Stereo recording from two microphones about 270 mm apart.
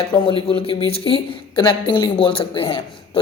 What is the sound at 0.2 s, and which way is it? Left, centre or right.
A woman's voice, centre.